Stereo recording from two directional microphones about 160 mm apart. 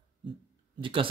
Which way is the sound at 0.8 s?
35° right (ahead or behind).